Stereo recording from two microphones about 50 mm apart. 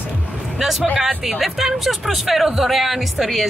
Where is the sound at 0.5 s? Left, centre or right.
Centre.